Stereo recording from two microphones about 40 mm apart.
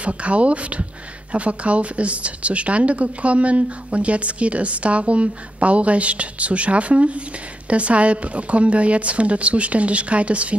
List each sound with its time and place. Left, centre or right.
0.0 s speech: right